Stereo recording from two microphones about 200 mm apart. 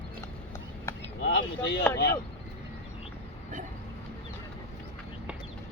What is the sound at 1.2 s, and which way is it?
Speech, 60° left (ahead or behind).